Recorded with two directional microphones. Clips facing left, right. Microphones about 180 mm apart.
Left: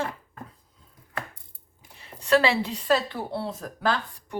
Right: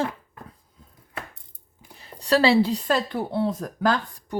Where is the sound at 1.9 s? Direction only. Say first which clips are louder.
Even; 35° right (ahead or behind).